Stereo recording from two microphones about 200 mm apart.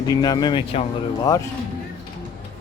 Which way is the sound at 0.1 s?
20° left (ahead or behind).